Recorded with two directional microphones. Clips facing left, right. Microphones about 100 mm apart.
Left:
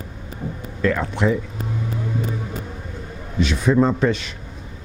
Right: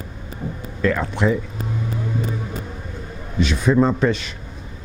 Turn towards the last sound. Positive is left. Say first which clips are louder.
# even
turn(degrees=-15)  # may be behind; listen again after turning